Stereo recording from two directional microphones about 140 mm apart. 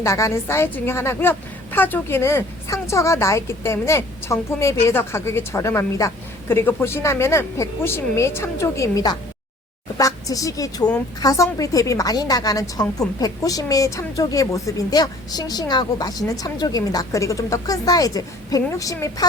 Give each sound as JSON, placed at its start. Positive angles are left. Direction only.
{"t": 0.0, "sound": "a woman's voice", "side_deg": 20}